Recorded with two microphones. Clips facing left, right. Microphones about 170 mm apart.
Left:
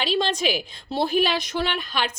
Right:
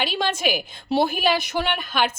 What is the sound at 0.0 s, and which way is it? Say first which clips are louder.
Speech: left 1 dB; centre (ahead or behind).